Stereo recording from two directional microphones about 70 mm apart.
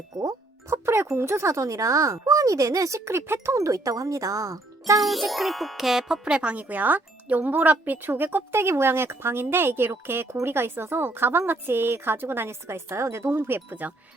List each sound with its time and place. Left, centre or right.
0.1 s speech: right
0.7 s music: right
1.1 s speech: right
3.1 s speech: right
3.6 s speech: right
4.9 s music: centre
6.2 s speech: centre